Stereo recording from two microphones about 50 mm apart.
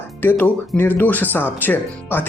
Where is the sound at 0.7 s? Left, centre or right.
Left.